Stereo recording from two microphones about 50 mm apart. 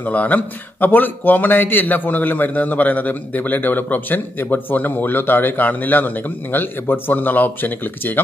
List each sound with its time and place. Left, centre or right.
0.0 s speech: left